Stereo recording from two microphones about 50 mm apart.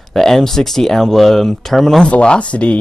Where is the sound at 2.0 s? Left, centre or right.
Left.